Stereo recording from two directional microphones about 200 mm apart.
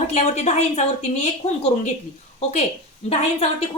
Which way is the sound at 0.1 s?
35° left (ahead or behind).